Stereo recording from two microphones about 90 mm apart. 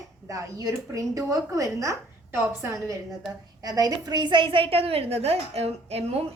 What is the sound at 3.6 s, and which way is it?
A woman's voice, 40° right (ahead or behind).